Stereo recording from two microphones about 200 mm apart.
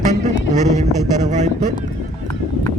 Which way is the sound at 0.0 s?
35° right (ahead or behind).